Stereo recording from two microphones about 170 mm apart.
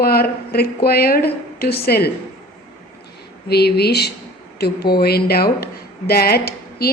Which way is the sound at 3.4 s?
70° left (ahead or behind).